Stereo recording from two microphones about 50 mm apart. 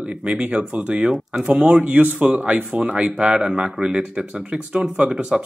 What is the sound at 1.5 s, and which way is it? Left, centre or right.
Speech, right.